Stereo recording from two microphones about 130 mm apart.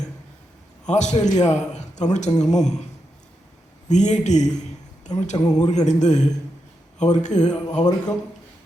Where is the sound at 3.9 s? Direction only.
65° left (ahead or behind).